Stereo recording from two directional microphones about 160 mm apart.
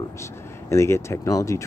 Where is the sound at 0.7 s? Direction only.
15° left (ahead or behind).